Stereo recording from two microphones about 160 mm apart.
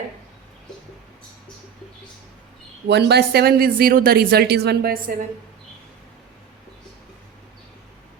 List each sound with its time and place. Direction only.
2.8 s speech: 90° right; by 5.1 s 65° right (ahead or behind)